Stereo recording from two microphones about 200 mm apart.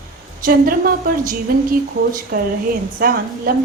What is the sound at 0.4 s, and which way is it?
Speech, 45° right (ahead or behind).